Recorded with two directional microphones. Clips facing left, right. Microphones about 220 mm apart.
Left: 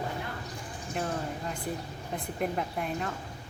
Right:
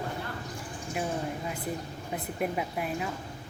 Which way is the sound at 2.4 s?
5° right (ahead or behind).